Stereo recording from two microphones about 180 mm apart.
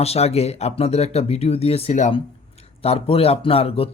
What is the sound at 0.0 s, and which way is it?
Speech, 35° left (ahead or behind).